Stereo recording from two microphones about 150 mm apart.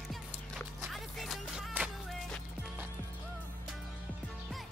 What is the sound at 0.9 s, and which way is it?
Music, centre (ahead or behind).